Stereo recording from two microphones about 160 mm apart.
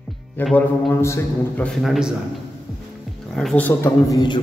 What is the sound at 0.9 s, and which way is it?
Speech, 15° left (ahead or behind).